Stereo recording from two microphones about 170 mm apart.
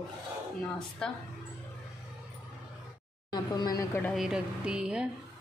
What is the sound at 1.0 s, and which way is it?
Speech, 5° left (ahead or behind).